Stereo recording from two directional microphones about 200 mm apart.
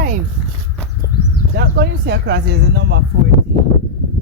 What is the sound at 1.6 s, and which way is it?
Speech, 55° right (ahead or behind).